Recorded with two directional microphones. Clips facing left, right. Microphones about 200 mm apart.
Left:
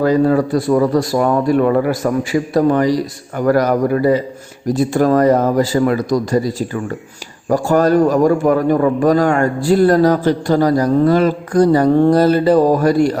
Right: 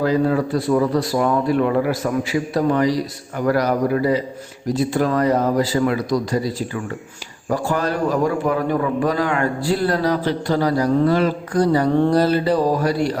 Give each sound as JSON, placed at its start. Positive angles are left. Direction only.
{"t": 0.0, "sound": "a man's voice", "side_deg": 45}